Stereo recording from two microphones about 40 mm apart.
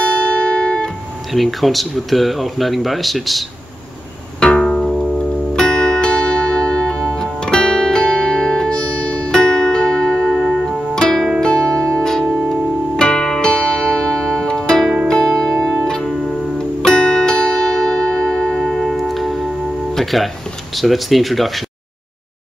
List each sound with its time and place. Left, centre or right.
0.0 s music: left
1.3 s speech: centre
4.4 s pizzicato: centre
5.6 s music: centre
10.5 s music: centre
18.9 s music: centre
20.7 s speech: centre